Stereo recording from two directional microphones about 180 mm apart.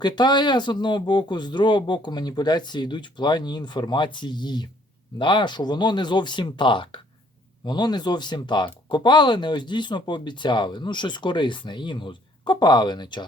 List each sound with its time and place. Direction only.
0.0 s speech: 25° left (ahead or behind)